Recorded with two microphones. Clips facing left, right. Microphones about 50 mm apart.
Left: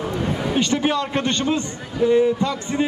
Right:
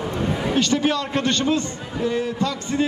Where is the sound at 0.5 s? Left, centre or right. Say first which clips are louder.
Even; centre.